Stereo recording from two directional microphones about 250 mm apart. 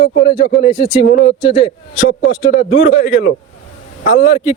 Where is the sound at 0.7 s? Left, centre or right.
Centre.